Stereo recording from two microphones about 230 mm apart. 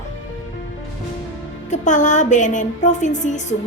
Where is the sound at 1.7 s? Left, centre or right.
Left.